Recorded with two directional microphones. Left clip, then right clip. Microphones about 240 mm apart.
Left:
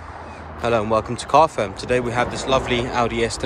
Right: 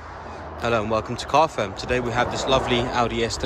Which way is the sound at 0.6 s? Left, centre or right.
Centre.